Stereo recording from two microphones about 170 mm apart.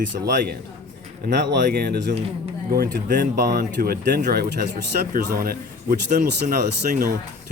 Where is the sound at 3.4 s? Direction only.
75° right (ahead or behind); by 7.2 s 55° right (ahead or behind).